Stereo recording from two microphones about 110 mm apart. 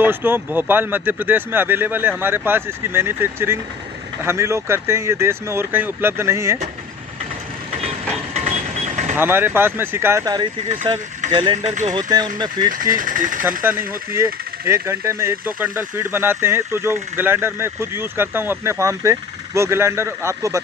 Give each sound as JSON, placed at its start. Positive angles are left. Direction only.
{"t": 0.0, "sound": "speech", "side_deg": -20}
{"t": 8.4, "sound": "a sound", "side_deg": -90}
{"t": 9.1, "sound": "speech", "side_deg": -20}
{"t": 10.9, "sound": "speech", "side_deg": -50}
{"t": 13.4, "sound": "speech", "side_deg": -20}